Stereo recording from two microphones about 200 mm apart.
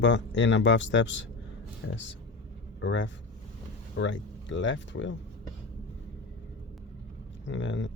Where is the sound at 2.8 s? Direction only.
65° left (ahead or behind).